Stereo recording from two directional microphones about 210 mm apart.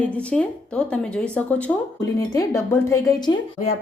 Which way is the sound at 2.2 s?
15° left (ahead or behind).